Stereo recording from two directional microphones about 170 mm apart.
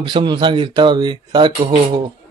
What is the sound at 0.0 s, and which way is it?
A man's voice, 25° right (ahead or behind).